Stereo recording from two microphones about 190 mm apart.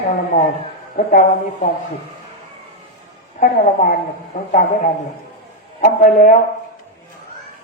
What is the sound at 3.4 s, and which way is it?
A man's voice, 40° left (ahead or behind).